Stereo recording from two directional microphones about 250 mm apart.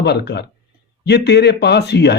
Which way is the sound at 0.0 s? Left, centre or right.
Left.